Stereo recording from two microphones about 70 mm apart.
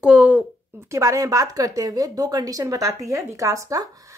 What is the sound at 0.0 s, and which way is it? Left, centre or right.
Speech, centre.